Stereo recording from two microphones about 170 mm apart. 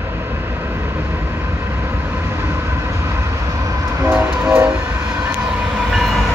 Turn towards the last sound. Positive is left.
turn(degrees=-15)  # may be behind; listen again after turning